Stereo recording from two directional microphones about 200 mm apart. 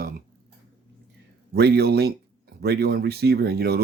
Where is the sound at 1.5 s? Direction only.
55° right (ahead or behind).